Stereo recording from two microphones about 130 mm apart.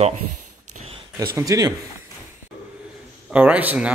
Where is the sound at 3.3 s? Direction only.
10° right (ahead or behind).